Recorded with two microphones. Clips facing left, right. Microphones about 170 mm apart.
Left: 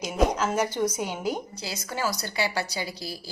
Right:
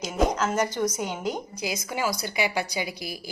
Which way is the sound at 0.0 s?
Centre (ahead or behind).